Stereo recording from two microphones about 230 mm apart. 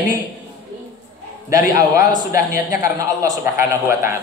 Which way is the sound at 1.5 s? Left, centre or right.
Centre.